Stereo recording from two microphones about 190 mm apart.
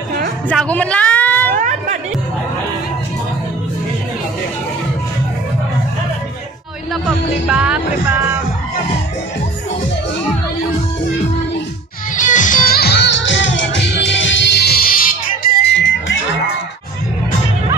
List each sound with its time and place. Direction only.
0.5 s a sound: 5° left (ahead or behind)
1.6 s music: 40° right (ahead or behind)
7.4 s music: 5° right (ahead or behind)
12.2 s music: 40° left (ahead or behind); by 16.2 s 70° left (ahead or behind)